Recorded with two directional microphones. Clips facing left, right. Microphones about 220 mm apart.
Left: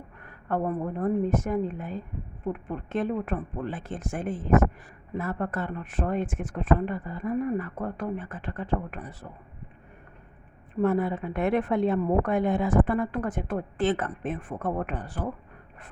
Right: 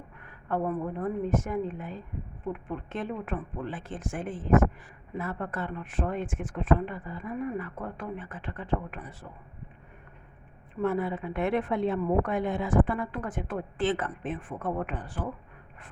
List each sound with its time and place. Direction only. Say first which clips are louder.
0.4 s a woman's voice: left 2 dB; 40° left (ahead or behind)
10.8 s a woman's voice: left 4 dB; 40° left (ahead or behind)